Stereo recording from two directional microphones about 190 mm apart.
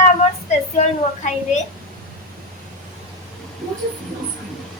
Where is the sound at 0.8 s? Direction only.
40° left (ahead or behind).